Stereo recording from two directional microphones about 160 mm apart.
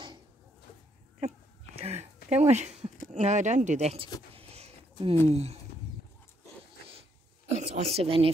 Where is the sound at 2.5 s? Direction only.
45° right (ahead or behind).